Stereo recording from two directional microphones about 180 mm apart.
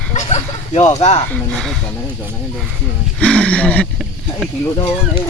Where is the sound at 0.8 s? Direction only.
20° left (ahead or behind).